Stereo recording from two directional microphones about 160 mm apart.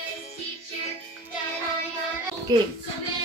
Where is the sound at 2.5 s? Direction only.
25° right (ahead or behind).